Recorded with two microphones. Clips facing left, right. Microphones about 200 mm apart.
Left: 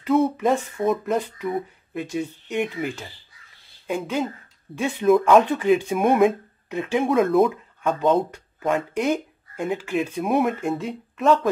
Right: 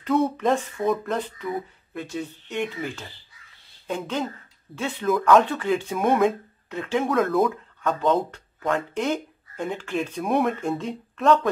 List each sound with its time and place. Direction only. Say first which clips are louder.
0.0 s speech: left 2 dB; 5° left (ahead or behind)
7.1 s speech: left 4 dB; 25° left (ahead or behind); by 11.4 s centre (ahead or behind)